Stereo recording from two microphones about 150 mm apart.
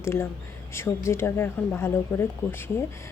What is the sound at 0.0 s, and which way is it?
Speech, 15° left (ahead or behind).